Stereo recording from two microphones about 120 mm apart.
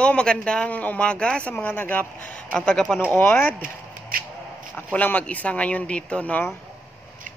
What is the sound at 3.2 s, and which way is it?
Speech, 15° left (ahead or behind).